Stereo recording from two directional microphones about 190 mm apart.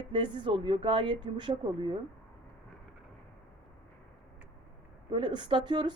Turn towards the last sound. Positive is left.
turn(degrees=-25)  # may be behind; listen again after turning